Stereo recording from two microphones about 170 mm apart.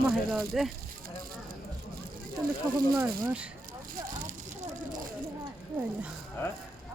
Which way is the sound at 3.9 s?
55° right (ahead or behind).